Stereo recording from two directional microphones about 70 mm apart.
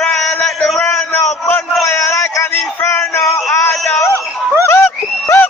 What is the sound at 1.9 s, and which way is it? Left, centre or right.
Speech, left.